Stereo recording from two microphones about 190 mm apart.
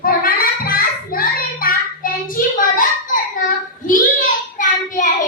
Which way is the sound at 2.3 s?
45° left (ahead or behind).